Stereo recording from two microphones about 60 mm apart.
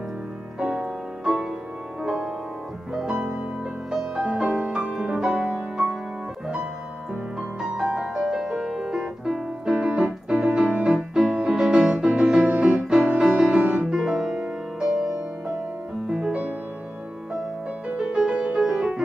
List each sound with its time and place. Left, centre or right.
0.6 s music: right
7.3 s music: centre
10.0 s keyboard: right
10.6 s music: right
13.8 s music: centre
17.9 s music: centre